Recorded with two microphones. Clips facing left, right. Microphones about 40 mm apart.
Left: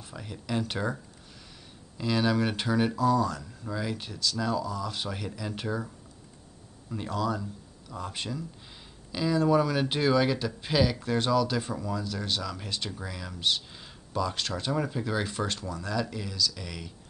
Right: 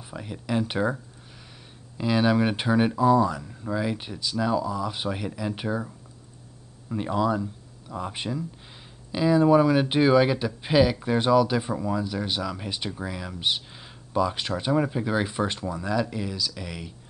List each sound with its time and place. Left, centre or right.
0.0 s speech: centre
2.0 s speech: centre